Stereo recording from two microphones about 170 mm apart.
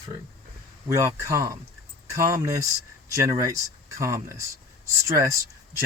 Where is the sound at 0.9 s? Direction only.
15° right (ahead or behind).